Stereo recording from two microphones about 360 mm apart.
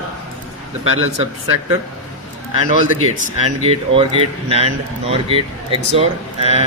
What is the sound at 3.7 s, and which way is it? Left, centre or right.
Speech, centre.